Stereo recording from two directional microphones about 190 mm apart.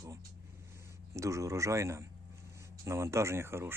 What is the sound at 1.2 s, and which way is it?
Speech, 15° right (ahead or behind).